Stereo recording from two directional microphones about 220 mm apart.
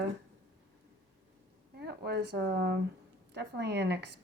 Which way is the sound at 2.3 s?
50° right (ahead or behind).